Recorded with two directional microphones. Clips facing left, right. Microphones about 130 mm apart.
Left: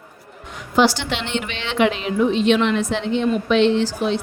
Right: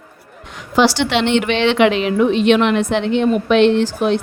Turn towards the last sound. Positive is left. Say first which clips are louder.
# right 4 dB
turn(degrees=-60)  # may be behind; listen again after turning